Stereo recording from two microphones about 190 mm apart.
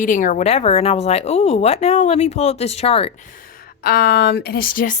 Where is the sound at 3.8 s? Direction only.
55° left (ahead or behind).